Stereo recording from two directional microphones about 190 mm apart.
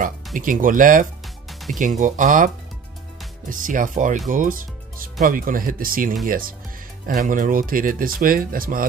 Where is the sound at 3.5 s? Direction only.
45° right (ahead or behind).